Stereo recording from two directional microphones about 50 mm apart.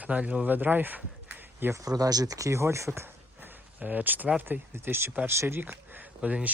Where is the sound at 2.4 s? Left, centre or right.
Right.